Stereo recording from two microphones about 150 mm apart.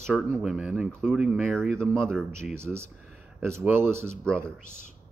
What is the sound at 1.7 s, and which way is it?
Speech, 5° left (ahead or behind).